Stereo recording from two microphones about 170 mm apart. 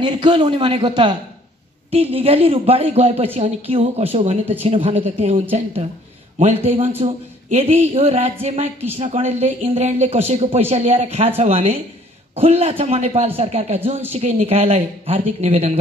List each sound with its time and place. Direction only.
0.0 s a man's voice: 30° right (ahead or behind)